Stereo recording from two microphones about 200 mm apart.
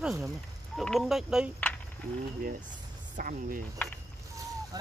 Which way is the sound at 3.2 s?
45° right (ahead or behind).